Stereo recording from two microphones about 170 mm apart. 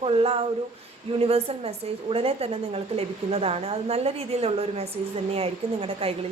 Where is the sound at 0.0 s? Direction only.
35° right (ahead or behind).